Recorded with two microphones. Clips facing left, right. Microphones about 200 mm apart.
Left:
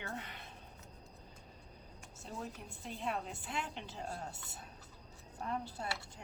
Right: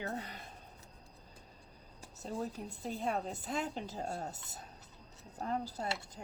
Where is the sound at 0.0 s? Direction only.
40° right (ahead or behind).